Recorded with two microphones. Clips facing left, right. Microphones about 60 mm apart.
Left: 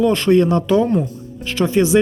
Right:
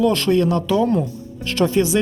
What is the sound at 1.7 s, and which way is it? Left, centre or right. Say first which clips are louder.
Speech: left 6 dB; left.